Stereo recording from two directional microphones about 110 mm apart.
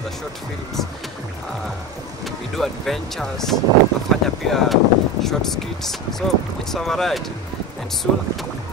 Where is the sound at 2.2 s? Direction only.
Centre (ahead or behind).